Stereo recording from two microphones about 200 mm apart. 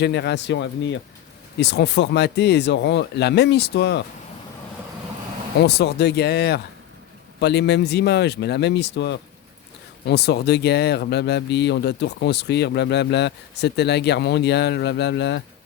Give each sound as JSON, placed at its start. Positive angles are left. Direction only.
{"t": 0.0, "sound": "speech", "side_deg": 60}
{"t": 5.6, "sound": "speech", "side_deg": 55}